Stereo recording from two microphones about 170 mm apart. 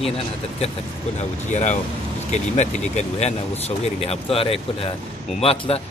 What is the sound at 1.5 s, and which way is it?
Speech, 45° left (ahead or behind).